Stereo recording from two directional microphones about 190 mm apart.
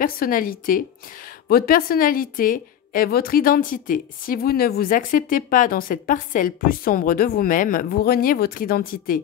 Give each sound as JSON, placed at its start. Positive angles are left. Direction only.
{"t": 0.0, "sound": "a woman's voice", "side_deg": 50}